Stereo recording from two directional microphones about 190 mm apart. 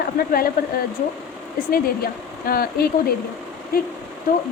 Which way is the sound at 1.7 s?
50° left (ahead or behind).